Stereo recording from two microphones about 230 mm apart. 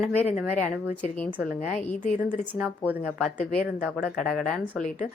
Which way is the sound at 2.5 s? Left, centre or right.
Centre.